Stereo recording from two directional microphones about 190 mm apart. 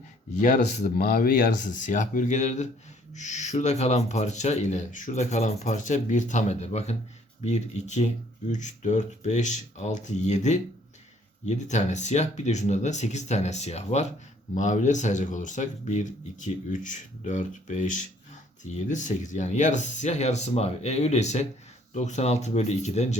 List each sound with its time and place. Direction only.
0.8 s speech: 45° left (ahead or behind)